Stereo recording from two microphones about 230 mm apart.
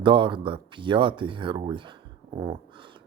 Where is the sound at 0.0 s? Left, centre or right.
Right.